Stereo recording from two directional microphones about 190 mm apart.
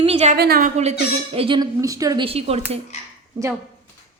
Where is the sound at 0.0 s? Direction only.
35° right (ahead or behind).